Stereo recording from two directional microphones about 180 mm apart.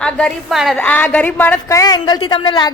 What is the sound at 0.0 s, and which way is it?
Speech, 5° left (ahead or behind).